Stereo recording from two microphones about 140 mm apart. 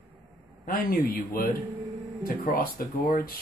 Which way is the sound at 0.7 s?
90° left.